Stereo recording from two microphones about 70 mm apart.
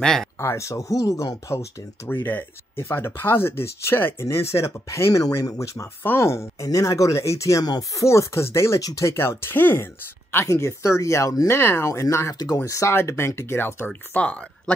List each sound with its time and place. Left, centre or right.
0.0 s speech: centre
0.4 s speech: left
2.0 s speech: left
6.0 s speech: left
10.3 s speech: left
11.4 s speech: left
12.6 s speech: left
12.9 s speech: left
14.1 s speech: centre